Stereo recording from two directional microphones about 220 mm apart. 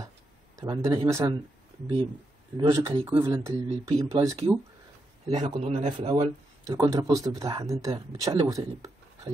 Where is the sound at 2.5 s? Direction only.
20° right (ahead or behind).